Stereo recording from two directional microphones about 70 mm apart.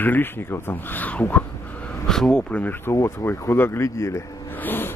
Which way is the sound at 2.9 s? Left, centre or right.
Left.